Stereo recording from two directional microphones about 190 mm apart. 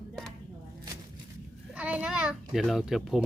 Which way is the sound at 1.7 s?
5° right (ahead or behind).